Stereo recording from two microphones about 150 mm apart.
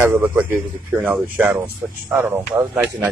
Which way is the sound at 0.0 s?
15° right (ahead or behind).